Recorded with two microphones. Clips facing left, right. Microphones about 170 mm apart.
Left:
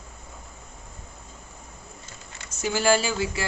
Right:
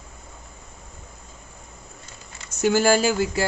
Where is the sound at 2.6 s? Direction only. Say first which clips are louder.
Right 4 dB; 50° right (ahead or behind).